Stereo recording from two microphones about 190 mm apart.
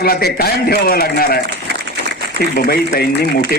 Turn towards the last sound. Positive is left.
turn(degrees=55)  # may be behind; listen again after turning